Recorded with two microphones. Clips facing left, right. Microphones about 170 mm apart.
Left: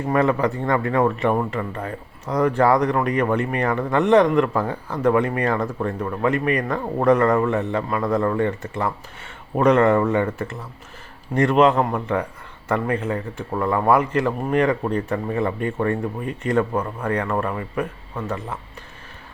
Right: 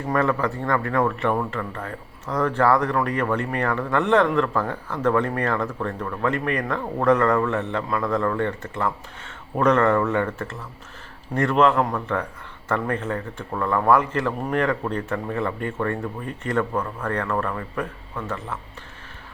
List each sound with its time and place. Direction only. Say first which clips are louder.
0.1 s speech: left 3 dB; 15° left (ahead or behind)